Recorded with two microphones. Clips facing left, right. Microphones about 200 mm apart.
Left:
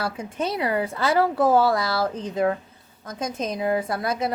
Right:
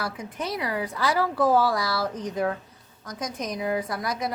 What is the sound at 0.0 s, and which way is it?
A woman's voice, 25° left (ahead or behind).